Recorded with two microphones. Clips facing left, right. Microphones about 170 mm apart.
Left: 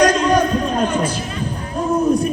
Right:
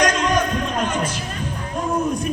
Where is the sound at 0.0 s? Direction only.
35° left (ahead or behind).